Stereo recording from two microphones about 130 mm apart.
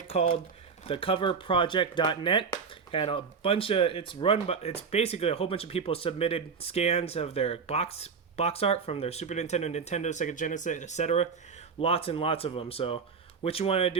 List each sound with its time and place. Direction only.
0.1 s speech: 50° left (ahead or behind)
11.8 s speech: 50° left (ahead or behind)